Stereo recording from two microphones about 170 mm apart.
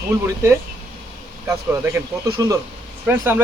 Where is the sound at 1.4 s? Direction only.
15° right (ahead or behind).